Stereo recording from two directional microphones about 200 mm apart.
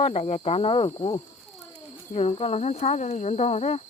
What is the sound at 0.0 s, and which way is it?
Speech, 30° left (ahead or behind).